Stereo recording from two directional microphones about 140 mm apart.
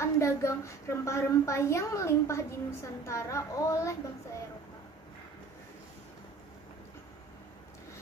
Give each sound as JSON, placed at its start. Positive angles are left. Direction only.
{"t": 0.0, "sound": "a woman's voice", "side_deg": 20}